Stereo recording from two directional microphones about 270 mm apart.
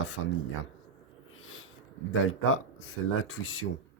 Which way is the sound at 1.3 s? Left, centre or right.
Left.